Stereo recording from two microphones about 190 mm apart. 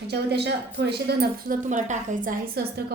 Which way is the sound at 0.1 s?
60° right (ahead or behind).